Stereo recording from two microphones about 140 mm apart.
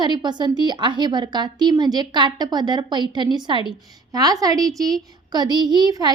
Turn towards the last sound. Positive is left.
turn(degrees=-30)  # may be behind; listen again after turning